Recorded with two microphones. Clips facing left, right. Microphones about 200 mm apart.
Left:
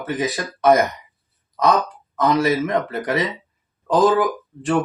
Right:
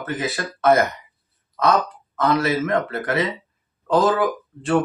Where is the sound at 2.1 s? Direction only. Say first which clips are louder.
Left 2 dB; 15° left (ahead or behind).